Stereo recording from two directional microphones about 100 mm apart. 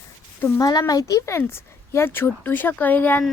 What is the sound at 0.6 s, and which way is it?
Speech, 40° left (ahead or behind).